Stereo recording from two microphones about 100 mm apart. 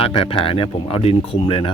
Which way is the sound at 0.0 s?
65° left (ahead or behind).